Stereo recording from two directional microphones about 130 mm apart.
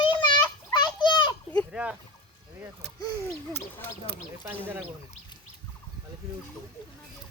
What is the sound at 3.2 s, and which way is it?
Owl, 20° left (ahead or behind).